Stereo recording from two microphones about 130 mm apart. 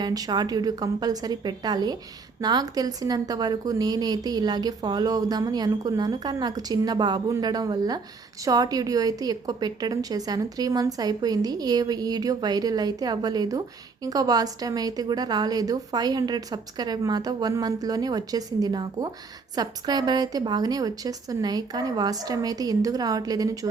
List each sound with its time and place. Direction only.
0.0 s a woman's voice: 30° right (ahead or behind)